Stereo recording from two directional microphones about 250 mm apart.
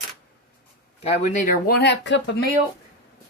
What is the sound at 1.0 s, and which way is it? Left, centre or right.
Speech, left.